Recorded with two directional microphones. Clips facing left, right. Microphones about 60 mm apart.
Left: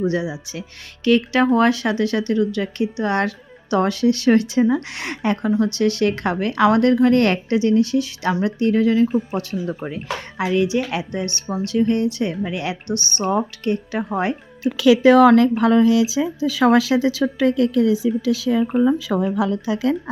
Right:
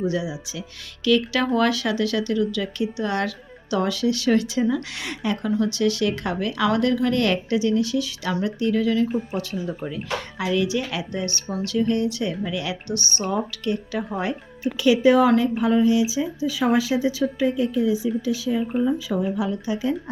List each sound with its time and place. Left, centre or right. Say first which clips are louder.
0.0 s speech: left 3 dB; left
14.8 s speech: left 5 dB; left